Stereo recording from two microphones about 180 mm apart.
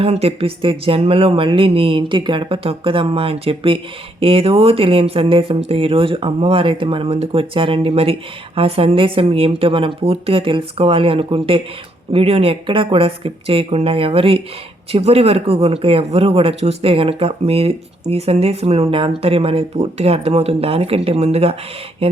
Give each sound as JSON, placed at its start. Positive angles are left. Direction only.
{"t": 0.0, "sound": "speech", "side_deg": -35}